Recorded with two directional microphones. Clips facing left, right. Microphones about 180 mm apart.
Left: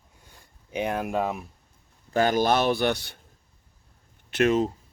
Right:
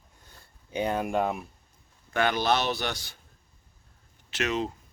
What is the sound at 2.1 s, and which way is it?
A man's voice, 40° left (ahead or behind).